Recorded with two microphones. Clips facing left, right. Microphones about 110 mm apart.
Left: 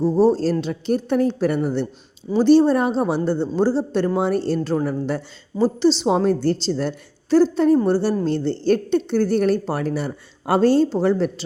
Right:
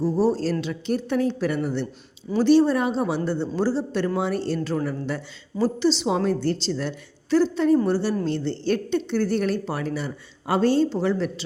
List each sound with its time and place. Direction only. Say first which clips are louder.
0.0 s speech: left 5 dB; 25° left (ahead or behind)
6.1 s speech: left 4 dB; 45° left (ahead or behind)